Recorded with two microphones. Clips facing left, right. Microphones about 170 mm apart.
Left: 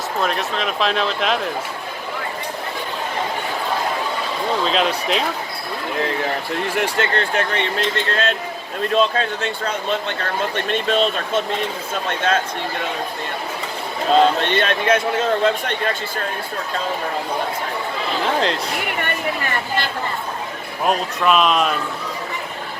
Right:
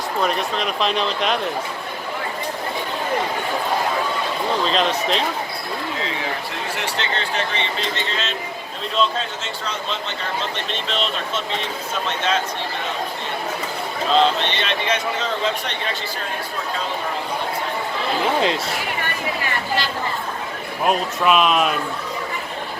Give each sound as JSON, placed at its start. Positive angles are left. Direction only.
{"t": 0.2, "sound": "speech", "side_deg": 0}
{"t": 4.6, "sound": "speech", "side_deg": 5}
{"t": 6.7, "sound": "a man's voice", "side_deg": 50}
{"t": 14.2, "sound": "a man's voice", "side_deg": 50}
{"t": 18.3, "sound": "speech", "side_deg": -5}
{"t": 20.8, "sound": "speech", "side_deg": 0}